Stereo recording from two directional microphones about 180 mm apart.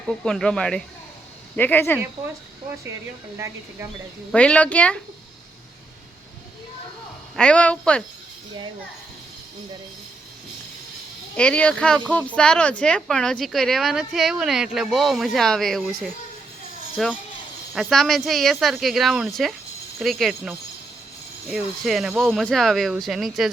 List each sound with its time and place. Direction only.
0.0 s a woman's voice: 5° left (ahead or behind)
3.3 s speech: 15° right (ahead or behind)
4.3 s a woman's voice: 5° left (ahead or behind)
7.3 s a woman's voice: 5° left (ahead or behind)
11.3 s a woman's voice: 5° left (ahead or behind)